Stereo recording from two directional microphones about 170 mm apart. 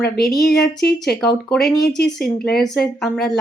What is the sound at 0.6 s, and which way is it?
Speech, 70° left (ahead or behind).